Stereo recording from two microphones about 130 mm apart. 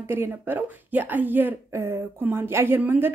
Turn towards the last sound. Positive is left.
turn(degrees=-15)  # may be behind; listen again after turning